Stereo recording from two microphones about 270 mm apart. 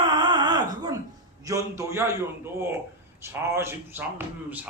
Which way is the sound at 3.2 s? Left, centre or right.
Centre.